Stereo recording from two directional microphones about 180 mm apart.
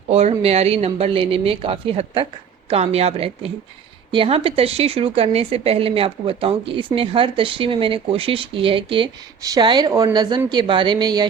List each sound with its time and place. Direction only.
0.1 s a woman's voice: 35° right (ahead or behind)